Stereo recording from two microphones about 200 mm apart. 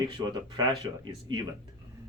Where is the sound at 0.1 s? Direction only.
20° right (ahead or behind).